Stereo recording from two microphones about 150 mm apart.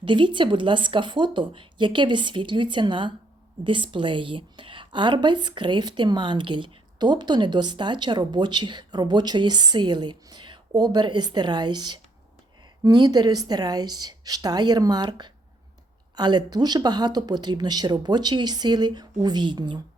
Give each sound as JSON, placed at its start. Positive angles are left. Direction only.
{"t": 0.0, "sound": "a woman's voice", "side_deg": -35}